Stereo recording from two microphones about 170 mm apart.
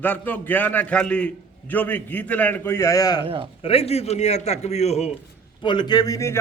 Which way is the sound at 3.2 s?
30° right (ahead or behind).